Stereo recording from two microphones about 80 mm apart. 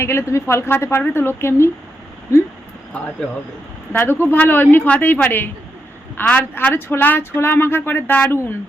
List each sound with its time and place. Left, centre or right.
0.0 s a woman's voice: left
3.9 s speech: left